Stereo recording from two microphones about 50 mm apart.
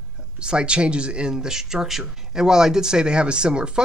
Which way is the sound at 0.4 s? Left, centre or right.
Centre.